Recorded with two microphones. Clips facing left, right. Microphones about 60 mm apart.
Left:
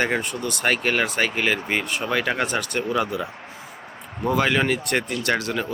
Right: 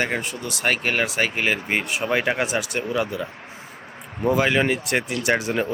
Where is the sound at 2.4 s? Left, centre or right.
Centre.